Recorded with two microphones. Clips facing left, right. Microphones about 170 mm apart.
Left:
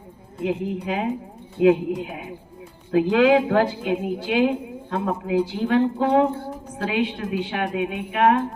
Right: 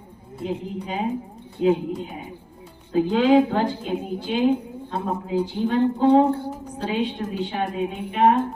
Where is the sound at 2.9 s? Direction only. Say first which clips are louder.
Even; 80° left.